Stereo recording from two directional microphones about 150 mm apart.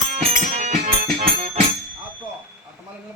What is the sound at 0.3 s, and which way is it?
Music, 55° right (ahead or behind).